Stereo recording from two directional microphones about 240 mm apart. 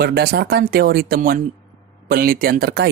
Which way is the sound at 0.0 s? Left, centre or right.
Right.